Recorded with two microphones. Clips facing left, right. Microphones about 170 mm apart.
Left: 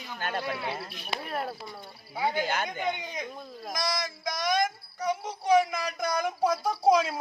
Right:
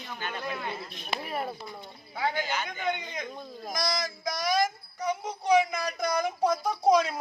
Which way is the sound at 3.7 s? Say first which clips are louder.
Right 1 dB; centre (ahead or behind).